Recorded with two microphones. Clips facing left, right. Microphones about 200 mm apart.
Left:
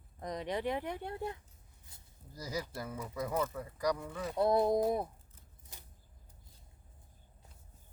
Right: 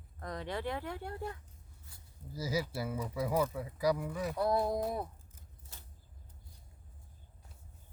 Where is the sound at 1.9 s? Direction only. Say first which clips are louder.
Even; 20° left (ahead or behind).